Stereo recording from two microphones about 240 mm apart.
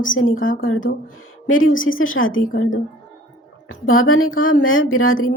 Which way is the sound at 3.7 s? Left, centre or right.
Left.